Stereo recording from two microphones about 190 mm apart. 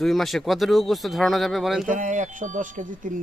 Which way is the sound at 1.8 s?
40° right (ahead or behind).